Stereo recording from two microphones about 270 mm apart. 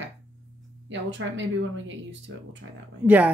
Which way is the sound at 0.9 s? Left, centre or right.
Right.